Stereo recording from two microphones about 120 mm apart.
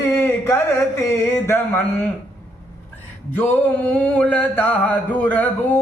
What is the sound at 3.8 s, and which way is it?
Mantra, 10° left (ahead or behind).